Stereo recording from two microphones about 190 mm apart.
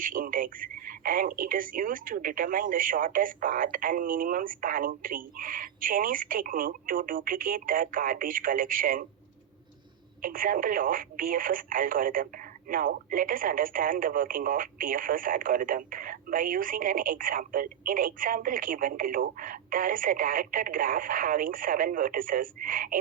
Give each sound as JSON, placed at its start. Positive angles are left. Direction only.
{"t": 0.0, "sound": "speech", "side_deg": -45}
{"t": 10.2, "sound": "speech", "side_deg": -45}